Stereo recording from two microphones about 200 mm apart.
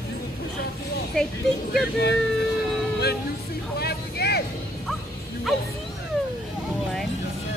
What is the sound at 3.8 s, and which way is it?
Vehicle, 50° left (ahead or behind).